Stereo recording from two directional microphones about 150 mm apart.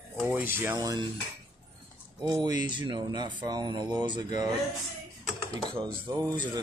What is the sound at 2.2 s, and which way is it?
Speech, 25° right (ahead or behind).